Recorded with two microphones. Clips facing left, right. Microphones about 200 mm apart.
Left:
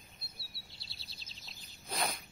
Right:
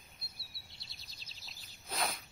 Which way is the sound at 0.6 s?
20° right (ahead or behind).